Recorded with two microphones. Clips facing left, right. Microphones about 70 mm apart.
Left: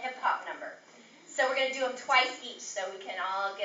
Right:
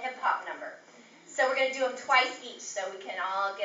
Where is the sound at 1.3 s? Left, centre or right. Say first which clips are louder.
Right 2 dB; centre.